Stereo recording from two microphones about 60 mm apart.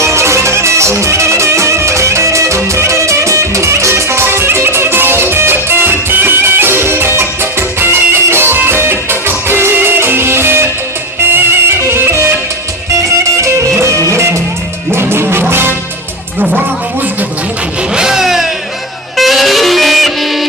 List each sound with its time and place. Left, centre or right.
0.0 s music: right
13.4 s music: right
17.9 s vehicle: centre
19.1 s music: centre